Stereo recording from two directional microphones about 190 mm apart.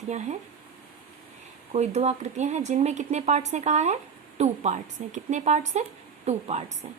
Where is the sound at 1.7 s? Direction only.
35° right (ahead or behind).